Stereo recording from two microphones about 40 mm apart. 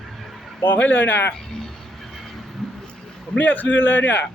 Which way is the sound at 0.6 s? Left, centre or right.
Left.